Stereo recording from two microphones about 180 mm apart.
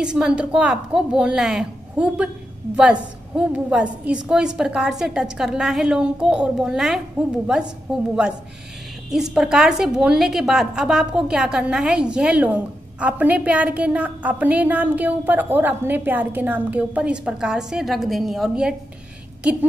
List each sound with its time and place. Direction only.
0.0 s a woman's voice: 5° right (ahead or behind)
9.1 s a woman's voice: 5° right (ahead or behind)